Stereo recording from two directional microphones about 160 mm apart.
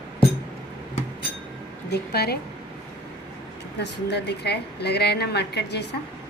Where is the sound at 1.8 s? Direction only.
90° left.